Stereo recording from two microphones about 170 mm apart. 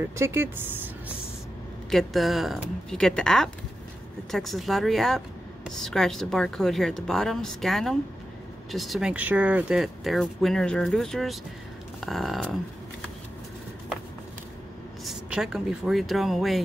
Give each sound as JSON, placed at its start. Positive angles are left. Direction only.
{"t": 0.2, "sound": "speech", "side_deg": -15}
{"t": 1.9, "sound": "speech", "side_deg": 0}
{"t": 15.0, "sound": "speech", "side_deg": -5}